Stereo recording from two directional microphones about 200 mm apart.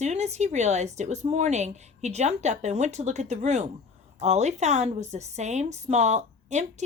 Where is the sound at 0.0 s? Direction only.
35° right (ahead or behind).